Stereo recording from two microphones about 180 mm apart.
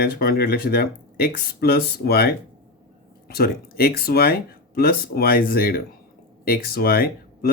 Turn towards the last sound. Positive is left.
turn(degrees=55)  # may be behind; listen again after turning